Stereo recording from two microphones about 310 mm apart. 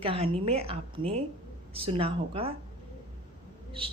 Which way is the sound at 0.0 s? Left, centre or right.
Centre.